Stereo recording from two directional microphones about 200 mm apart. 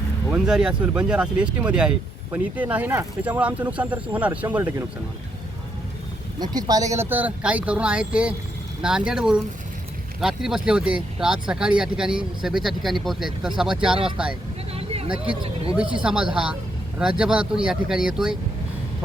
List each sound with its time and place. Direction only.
0.3 s speech: 5° right (ahead or behind)
6.4 s speech: 20° right (ahead or behind)
14.7 s vehicle: 30° right (ahead or behind)
15.7 s speech: 5° right (ahead or behind)